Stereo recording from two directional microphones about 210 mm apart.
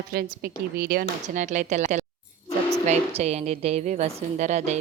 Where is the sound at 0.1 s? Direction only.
45° right (ahead or behind).